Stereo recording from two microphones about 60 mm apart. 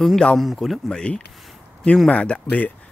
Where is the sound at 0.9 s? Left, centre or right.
Centre.